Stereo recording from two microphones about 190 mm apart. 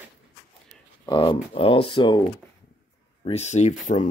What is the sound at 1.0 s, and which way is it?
Speech, 25° left (ahead or behind).